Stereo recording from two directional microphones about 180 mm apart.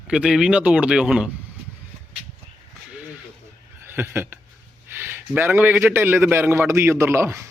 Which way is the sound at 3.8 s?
15° right (ahead or behind).